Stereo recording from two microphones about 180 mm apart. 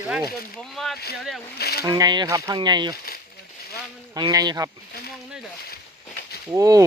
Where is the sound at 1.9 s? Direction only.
20° right (ahead or behind).